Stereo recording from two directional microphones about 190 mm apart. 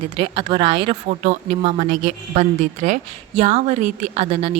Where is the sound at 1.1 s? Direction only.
40° right (ahead or behind).